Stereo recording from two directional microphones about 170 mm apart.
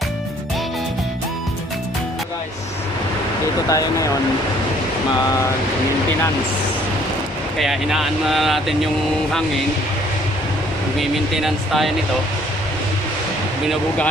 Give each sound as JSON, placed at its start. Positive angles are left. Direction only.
{"t": 3.6, "sound": "speech", "side_deg": 20}
{"t": 7.5, "sound": "speech", "side_deg": 0}
{"t": 11.0, "sound": "speech", "side_deg": 0}